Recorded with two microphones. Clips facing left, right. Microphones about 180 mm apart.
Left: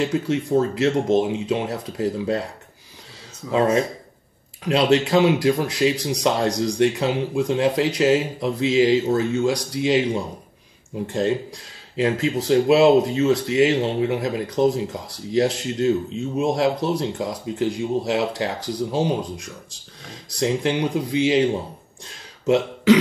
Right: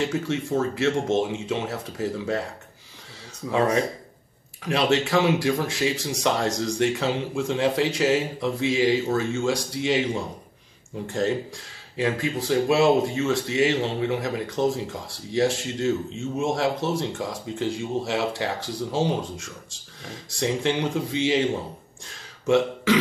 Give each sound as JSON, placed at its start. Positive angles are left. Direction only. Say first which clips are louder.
{"t": 0.0, "sound": "speech", "louder": "left 4 dB", "side_deg": 20}
{"t": 3.5, "sound": "speech", "louder": "left 3 dB", "side_deg": 25}
{"t": 22.0, "sound": "a sound", "louder": "left 4 dB", "side_deg": 20}